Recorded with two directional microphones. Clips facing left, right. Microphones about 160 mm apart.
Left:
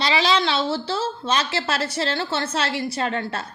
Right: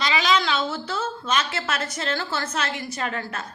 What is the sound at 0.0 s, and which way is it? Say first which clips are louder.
A woman's voice: left 2 dB; 30° left (ahead or behind).